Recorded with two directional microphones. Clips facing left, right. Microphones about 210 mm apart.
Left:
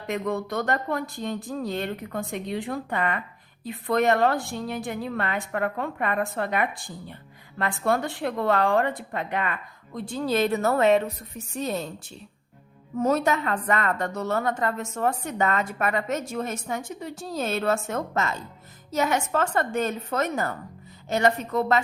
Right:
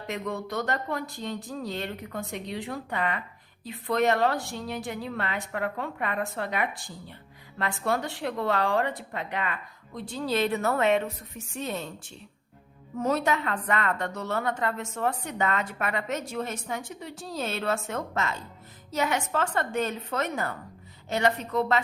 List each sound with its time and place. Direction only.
0.1 s a woman's voice: 50° left (ahead or behind)
13.0 s a woman's voice: 45° left (ahead or behind)